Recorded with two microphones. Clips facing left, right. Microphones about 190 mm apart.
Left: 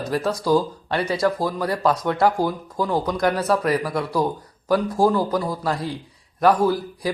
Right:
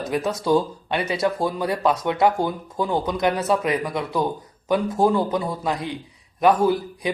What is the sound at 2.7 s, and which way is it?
Speech, centre (ahead or behind).